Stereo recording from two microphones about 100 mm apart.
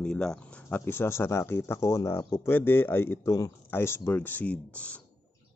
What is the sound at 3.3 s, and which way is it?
A man's voice, 30° left (ahead or behind).